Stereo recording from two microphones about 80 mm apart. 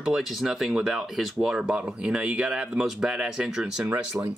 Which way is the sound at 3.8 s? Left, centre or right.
Right.